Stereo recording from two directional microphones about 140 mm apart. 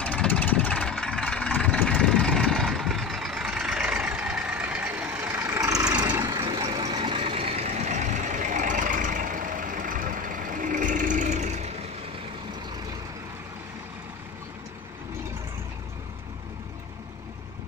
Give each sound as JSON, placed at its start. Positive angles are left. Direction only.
{"t": 0.0, "sound": "vehicle", "side_deg": 5}